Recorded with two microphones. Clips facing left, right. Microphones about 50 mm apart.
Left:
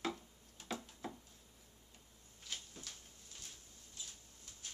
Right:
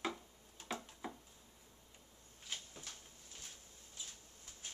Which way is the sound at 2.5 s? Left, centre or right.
Centre.